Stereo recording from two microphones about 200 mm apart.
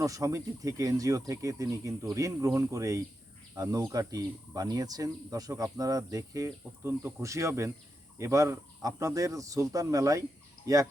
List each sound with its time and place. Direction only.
0.0 s speech: 15° right (ahead or behind)